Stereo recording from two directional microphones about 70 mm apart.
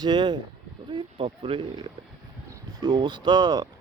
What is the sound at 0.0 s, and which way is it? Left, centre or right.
Speech, right.